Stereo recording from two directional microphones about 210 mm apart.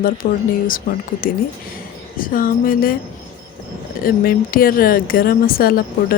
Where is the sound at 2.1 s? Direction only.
40° left (ahead or behind).